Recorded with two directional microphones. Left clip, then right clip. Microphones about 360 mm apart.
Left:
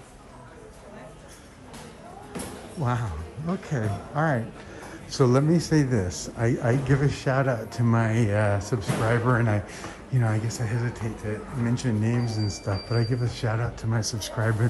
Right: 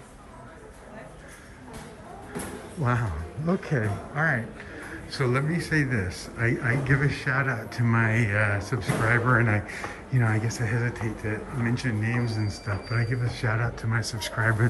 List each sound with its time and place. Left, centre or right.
2.8 s a man's voice: centre